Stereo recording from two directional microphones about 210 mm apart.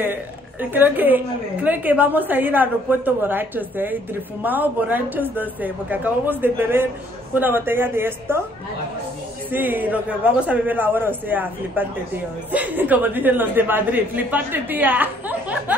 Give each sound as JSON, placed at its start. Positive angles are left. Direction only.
{"t": 0.0, "sound": "a woman's voice", "side_deg": -10}
{"t": 9.5, "sound": "a woman's voice", "side_deg": -10}